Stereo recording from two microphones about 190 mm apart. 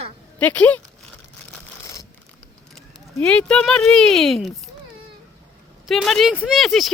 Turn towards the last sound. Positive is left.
turn(degrees=0)  # may be behind; listen again after turning